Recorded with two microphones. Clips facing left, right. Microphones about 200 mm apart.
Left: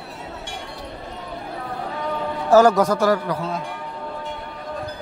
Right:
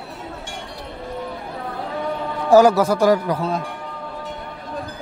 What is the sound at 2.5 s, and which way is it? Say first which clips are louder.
Speech: right 1 dB; 10° right (ahead or behind).